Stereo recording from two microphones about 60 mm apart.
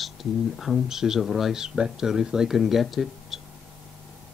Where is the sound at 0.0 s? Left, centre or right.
Centre.